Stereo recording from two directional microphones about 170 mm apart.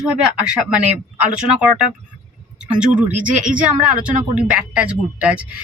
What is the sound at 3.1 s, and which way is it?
Speech, 50° right (ahead or behind).